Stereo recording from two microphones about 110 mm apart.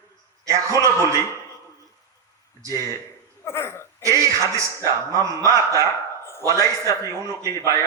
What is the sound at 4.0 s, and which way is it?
Speech, 30° right (ahead or behind).